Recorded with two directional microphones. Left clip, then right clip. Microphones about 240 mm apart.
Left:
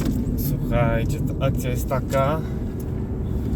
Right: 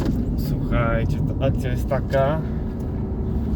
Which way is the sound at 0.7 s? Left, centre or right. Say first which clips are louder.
Left 1 dB; centre.